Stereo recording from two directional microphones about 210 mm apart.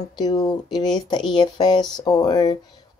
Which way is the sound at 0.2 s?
20° left (ahead or behind).